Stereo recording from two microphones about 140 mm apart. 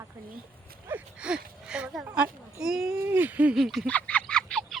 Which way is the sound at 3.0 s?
15° right (ahead or behind).